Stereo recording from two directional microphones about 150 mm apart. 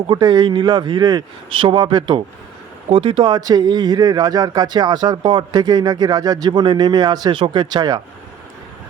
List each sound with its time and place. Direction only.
0.1 s a man's voice: 30° right (ahead or behind)